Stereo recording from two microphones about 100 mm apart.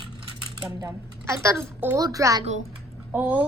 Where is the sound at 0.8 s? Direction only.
30° right (ahead or behind).